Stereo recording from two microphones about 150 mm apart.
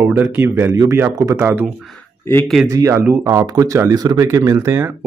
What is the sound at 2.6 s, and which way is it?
A man's voice, 20° right (ahead or behind).